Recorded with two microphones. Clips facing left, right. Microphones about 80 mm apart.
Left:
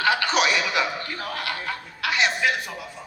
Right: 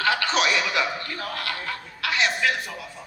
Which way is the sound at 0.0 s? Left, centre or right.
Centre.